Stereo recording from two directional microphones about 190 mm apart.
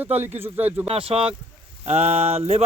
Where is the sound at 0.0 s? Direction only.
10° right (ahead or behind).